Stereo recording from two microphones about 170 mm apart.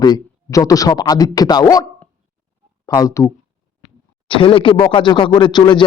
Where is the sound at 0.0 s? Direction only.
20° left (ahead or behind).